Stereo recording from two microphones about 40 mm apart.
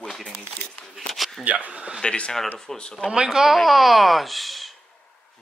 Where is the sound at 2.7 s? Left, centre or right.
Centre.